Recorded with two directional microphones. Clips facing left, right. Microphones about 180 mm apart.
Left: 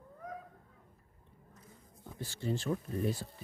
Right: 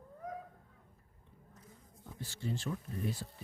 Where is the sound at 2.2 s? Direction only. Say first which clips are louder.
Left 4 dB; 35° left (ahead or behind).